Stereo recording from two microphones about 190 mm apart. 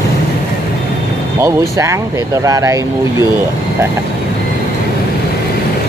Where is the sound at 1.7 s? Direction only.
15° right (ahead or behind).